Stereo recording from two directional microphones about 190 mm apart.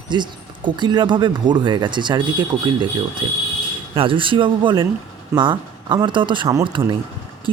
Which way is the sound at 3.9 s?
25° right (ahead or behind).